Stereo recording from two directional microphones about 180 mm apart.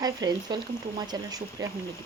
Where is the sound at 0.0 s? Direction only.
20° right (ahead or behind).